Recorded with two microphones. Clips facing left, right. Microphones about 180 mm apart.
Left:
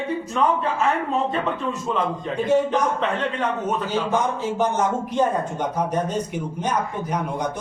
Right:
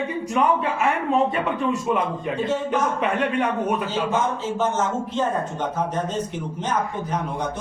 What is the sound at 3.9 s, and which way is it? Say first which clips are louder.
A woman's voice: left 1 dB; 15° left (ahead or behind).